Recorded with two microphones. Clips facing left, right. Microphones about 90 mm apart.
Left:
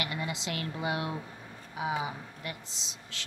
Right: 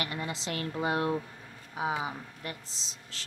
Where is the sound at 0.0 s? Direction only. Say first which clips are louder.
Even; 40° right (ahead or behind).